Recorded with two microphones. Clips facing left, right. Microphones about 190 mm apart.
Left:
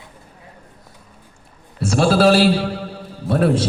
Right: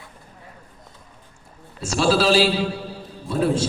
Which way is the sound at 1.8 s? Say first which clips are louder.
Left 4 dB; 55° left (ahead or behind).